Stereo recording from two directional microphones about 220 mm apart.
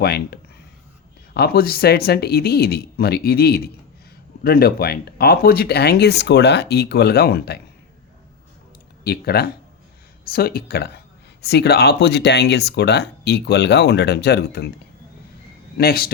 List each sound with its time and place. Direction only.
0.0 s speech: 45° left (ahead or behind)
9.0 s speech: 45° left (ahead or behind)
15.8 s speech: 45° left (ahead or behind)